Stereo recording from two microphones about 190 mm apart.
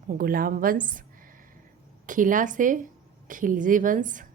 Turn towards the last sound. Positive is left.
turn(degrees=-45)  # may be behind; listen again after turning